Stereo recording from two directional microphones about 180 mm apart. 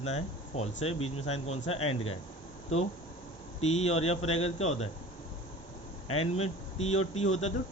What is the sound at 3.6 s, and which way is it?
Speech, 35° left (ahead or behind).